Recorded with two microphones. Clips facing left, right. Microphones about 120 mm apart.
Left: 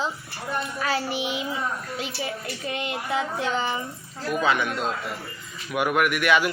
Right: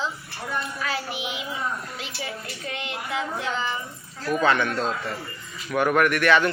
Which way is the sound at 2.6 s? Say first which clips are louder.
Left 4 dB; 15° left (ahead or behind).